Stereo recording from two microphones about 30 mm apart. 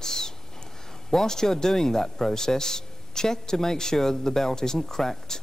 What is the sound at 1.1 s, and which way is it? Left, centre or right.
Speech, centre.